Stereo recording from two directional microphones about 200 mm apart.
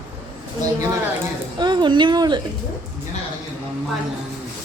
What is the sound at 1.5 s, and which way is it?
Speech, 20° right (ahead or behind).